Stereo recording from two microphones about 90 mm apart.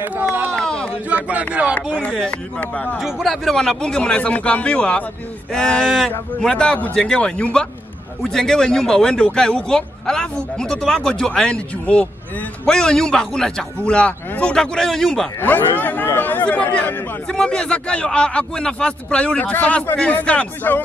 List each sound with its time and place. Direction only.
0.0 s speech: 20° right (ahead or behind)
0.6 s a sound: 10° left (ahead or behind)
1.1 s speech: 15° right (ahead or behind)
2.0 s speech: 10° left (ahead or behind)
3.0 s speech: centre (ahead or behind)
15.4 s speech: 20° left (ahead or behind)